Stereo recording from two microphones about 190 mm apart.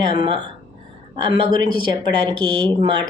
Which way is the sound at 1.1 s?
25° right (ahead or behind).